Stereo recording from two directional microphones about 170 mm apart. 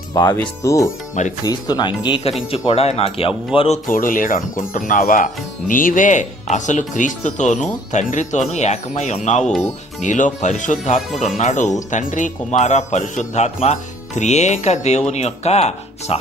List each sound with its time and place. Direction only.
0.1 s speech: 25° left (ahead or behind)
3.8 s speech: 55° left (ahead or behind)
9.4 s speech: 5° left (ahead or behind)
10.0 s speech: 45° left (ahead or behind)